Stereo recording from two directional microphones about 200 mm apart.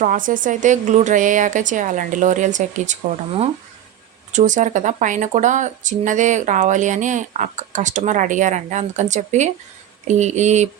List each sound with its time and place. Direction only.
0.0 s speech: 40° right (ahead or behind)